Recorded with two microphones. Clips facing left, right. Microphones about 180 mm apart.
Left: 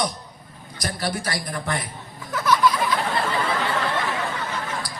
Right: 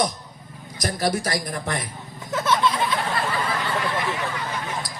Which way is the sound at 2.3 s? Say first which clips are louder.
Left 1 dB; 25° right (ahead or behind).